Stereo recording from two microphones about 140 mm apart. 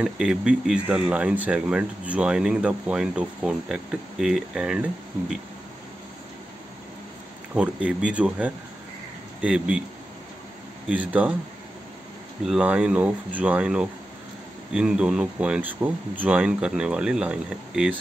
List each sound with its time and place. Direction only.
0.0 s speech: 5° right (ahead or behind)
7.5 s speech: 10° right (ahead or behind)
10.9 s speech: 10° right (ahead or behind)
12.4 s speech: 5° right (ahead or behind)